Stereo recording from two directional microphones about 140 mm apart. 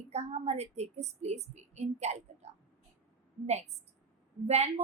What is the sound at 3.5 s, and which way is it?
A woman's voice, 50° right (ahead or behind).